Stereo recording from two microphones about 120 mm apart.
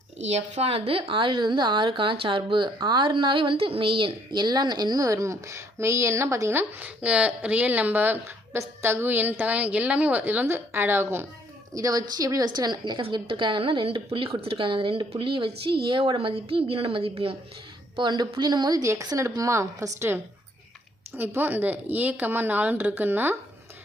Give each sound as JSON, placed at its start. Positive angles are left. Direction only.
{"t": 0.2, "sound": "a woman's voice", "side_deg": -65}
{"t": 17.9, "sound": "a woman's voice", "side_deg": -40}